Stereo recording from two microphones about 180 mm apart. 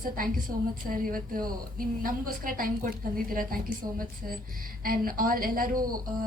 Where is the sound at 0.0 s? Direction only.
50° right (ahead or behind).